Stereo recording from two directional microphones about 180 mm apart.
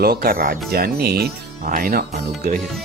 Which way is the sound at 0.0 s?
60° right (ahead or behind).